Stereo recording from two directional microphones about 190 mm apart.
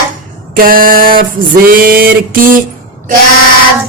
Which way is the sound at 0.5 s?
50° right (ahead or behind).